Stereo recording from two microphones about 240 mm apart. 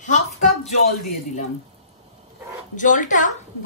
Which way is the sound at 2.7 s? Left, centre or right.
Left.